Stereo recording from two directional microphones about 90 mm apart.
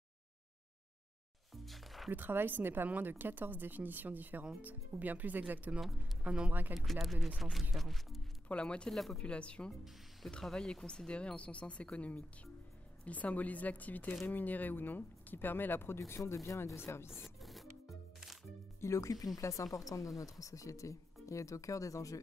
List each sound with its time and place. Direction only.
1.5 s music: centre (ahead or behind)
2.0 s speech: 20° right (ahead or behind)
5.8 s speech: centre (ahead or behind)
8.5 s speech: 10° left (ahead or behind)
9.2 s speech: 10° left (ahead or behind)
9.7 s speech: centre (ahead or behind); by 17.1 s 30° left (ahead or behind)
17.1 s a sound: centre (ahead or behind)
18.8 s speech: 35° left (ahead or behind)